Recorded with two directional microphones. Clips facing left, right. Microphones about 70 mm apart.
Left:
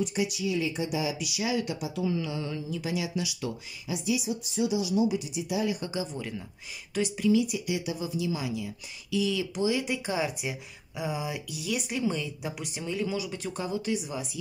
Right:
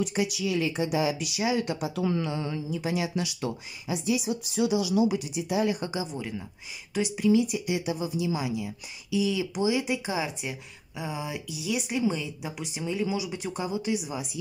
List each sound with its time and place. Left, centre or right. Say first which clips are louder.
0.0 s a woman's voice: right 1 dB; right
1.2 s speech: right 2 dB; right
2.0 s a woman's voice: right 1 dB; right
2.2 s a woman's voice: right 2 dB; right
2.9 s speech: right 2 dB; right
4.3 s speech: right 2 dB; right
5.3 s a woman's voice: right 3 dB; right
6.1 s speech: right 2 dB; centre
7.2 s a woman's voice: right 2 dB; right; by 10.3 s centre
10.3 s speech: left 1 dB; centre